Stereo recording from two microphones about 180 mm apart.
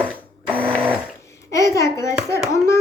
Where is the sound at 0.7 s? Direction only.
10° right (ahead or behind).